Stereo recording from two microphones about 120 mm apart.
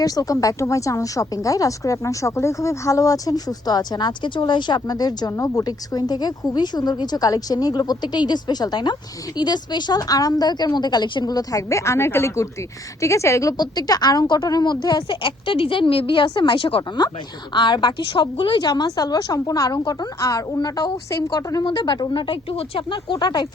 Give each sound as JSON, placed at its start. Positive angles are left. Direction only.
{"t": 0.0, "sound": "a woman's voice", "side_deg": 30}
{"t": 18.6, "sound": "a woman's voice", "side_deg": 30}